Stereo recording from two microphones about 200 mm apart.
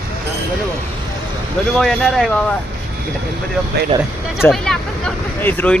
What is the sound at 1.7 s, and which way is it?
Speech, centre (ahead or behind).